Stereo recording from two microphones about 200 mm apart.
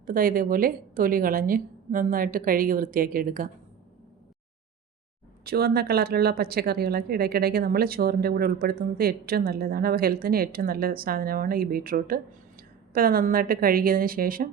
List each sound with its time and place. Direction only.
0.0 s a woman's voice: 45° right (ahead or behind)
5.5 s a woman's voice: 50° right (ahead or behind)